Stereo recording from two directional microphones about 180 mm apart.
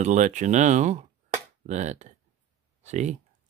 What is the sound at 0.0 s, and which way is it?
Speech, 45° right (ahead or behind).